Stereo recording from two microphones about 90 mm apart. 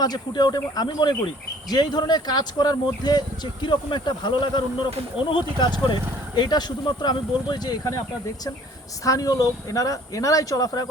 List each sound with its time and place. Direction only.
0.0 s speech: 50° left (ahead or behind)
9.0 s speech: 40° left (ahead or behind)